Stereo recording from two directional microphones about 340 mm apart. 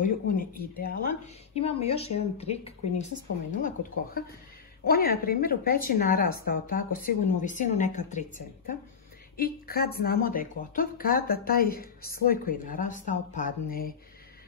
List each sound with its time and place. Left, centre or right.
0.0 s speech: left
4.8 s speech: left